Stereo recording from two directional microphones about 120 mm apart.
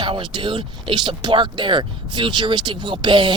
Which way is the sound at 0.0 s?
40° right (ahead or behind).